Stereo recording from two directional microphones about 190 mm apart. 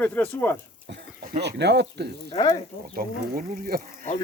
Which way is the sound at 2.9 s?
50° right (ahead or behind).